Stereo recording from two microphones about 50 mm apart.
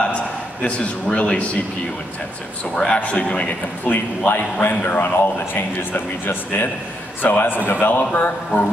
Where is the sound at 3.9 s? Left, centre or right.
Left.